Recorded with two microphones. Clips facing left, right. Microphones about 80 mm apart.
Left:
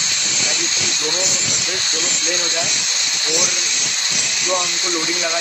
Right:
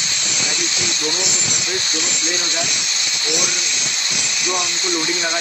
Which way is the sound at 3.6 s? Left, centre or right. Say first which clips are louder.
Even; left.